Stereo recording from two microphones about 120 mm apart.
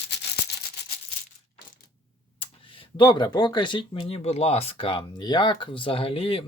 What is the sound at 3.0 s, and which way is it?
Speech, 40° left (ahead or behind).